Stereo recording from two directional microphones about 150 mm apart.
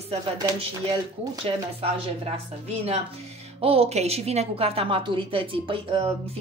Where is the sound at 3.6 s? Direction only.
40° right (ahead or behind).